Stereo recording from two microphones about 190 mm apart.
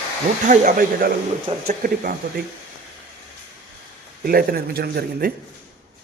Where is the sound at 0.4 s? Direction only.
40° right (ahead or behind).